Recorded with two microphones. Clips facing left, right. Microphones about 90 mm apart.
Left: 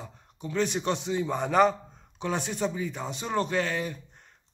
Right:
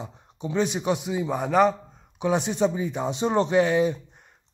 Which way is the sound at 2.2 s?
15° right (ahead or behind).